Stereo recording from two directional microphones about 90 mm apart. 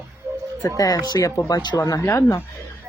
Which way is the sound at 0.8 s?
45° left (ahead or behind).